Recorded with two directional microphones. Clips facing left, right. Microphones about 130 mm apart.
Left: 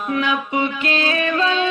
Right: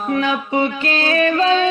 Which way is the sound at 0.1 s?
35° right (ahead or behind).